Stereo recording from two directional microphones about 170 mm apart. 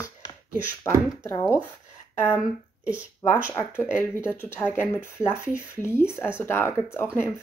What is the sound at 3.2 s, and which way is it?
Speech, 15° left (ahead or behind).